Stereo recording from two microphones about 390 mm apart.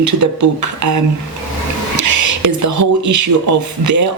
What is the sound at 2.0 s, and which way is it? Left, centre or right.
Speech, right.